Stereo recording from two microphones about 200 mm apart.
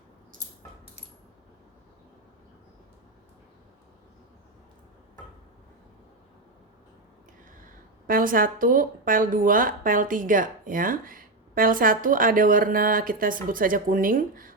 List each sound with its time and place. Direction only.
8.0 s speech: 45° right (ahead or behind)